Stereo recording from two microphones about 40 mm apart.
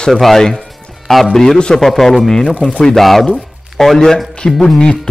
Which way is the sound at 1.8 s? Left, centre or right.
Centre.